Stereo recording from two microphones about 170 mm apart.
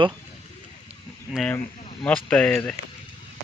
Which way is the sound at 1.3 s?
Centre (ahead or behind).